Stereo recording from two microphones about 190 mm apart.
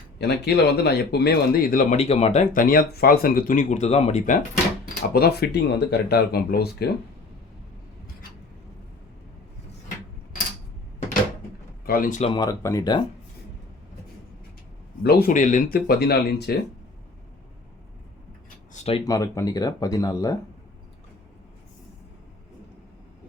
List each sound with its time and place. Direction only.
0.2 s speech: 60° left (ahead or behind); by 4.4 s 35° left (ahead or behind)
5.1 s speech: 55° left (ahead or behind)
11.9 s speech: 45° left (ahead or behind)
12.3 s speech: 20° left (ahead or behind)
15.0 s speech: 50° left (ahead or behind)
18.7 s speech: 35° left (ahead or behind)
19.0 s speech: 20° left (ahead or behind)